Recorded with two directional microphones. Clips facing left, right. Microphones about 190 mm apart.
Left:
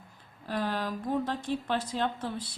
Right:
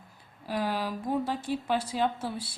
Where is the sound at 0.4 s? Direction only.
10° right (ahead or behind).